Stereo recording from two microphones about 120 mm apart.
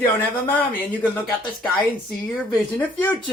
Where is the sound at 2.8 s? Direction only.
10° left (ahead or behind).